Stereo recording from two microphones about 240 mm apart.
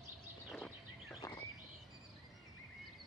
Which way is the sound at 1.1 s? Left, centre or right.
Centre.